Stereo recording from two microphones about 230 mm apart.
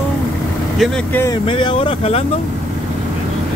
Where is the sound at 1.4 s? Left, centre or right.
Left.